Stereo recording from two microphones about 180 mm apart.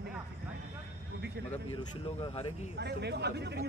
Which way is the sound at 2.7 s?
65° right (ahead or behind).